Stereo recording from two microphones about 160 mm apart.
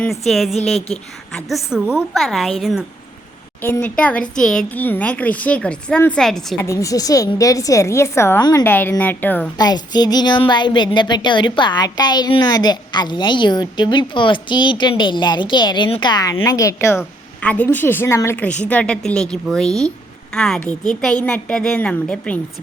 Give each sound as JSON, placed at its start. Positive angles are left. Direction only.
{"t": 0.0, "sound": "a woman's voice", "side_deg": 0}
{"t": 3.6, "sound": "speech", "side_deg": 10}
{"t": 6.7, "sound": "speech", "side_deg": 20}
{"t": 8.6, "sound": "speech", "side_deg": 10}
{"t": 9.6, "sound": "speech", "side_deg": 25}